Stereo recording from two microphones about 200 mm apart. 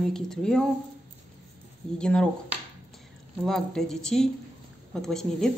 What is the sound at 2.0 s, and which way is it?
Speech, 5° left (ahead or behind).